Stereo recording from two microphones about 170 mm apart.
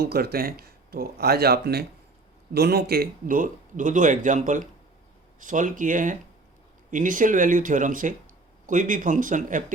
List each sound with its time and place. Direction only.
0.0 s speech: 65° right (ahead or behind); by 9.7 s 50° right (ahead or behind)